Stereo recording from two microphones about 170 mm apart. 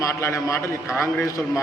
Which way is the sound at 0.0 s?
15° left (ahead or behind).